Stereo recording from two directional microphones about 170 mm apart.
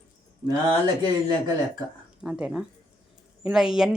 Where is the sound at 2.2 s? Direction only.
5° right (ahead or behind).